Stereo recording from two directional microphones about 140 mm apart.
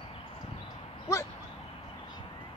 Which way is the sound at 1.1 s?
20° left (ahead or behind).